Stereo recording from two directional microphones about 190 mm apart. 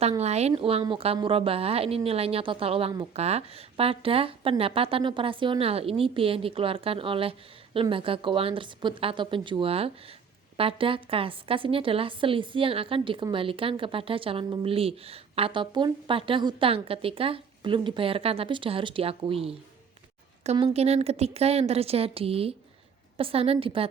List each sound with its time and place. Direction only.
0.0 s a woman's voice: 35° right (ahead or behind)